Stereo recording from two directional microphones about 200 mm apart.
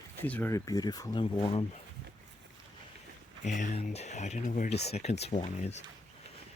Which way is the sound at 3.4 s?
40° left (ahead or behind).